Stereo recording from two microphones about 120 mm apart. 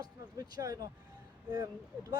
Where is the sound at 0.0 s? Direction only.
30° right (ahead or behind).